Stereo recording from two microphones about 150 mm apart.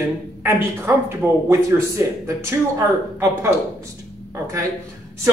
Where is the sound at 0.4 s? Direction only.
15° right (ahead or behind).